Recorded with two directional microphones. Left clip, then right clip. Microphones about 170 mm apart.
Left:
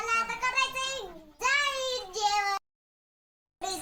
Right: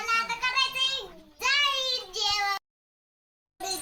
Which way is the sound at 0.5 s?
45° left (ahead or behind).